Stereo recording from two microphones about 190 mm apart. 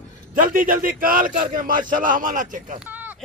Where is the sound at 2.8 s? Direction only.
10° right (ahead or behind).